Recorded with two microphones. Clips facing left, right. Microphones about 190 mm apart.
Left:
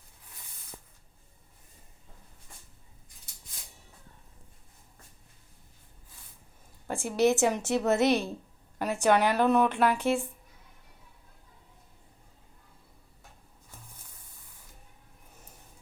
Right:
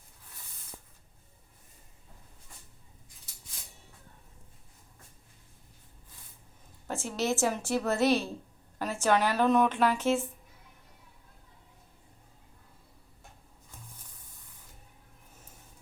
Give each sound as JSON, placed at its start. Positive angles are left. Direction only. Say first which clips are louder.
{"t": 6.8, "sound": "a woman's voice", "louder": "left 6 dB", "side_deg": 15}